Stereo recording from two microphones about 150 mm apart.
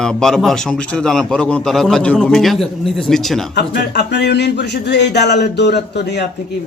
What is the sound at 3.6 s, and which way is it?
Speech, 90° left.